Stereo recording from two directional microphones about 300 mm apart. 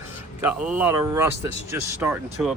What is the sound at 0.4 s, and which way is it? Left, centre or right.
Speech, centre.